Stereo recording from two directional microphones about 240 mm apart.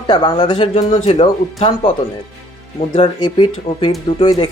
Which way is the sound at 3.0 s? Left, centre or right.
Centre.